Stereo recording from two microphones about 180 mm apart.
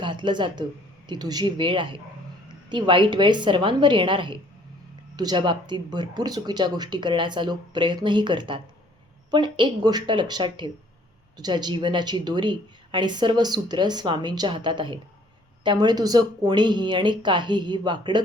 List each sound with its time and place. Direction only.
0.0 s speech: 25° right (ahead or behind)